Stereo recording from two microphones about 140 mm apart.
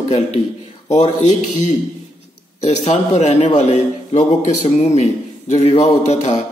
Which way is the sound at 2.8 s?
50° left (ahead or behind).